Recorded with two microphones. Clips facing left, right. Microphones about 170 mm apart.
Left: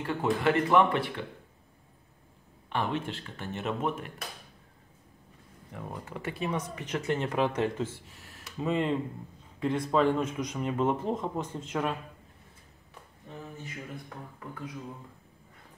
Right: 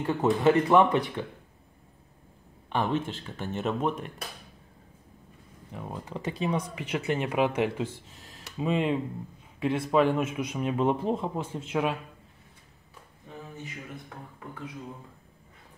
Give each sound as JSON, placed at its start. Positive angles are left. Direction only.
{"t": 0.0, "sound": "speech", "side_deg": -20}
{"t": 2.7, "sound": "speech", "side_deg": -45}
{"t": 5.7, "sound": "speech", "side_deg": -20}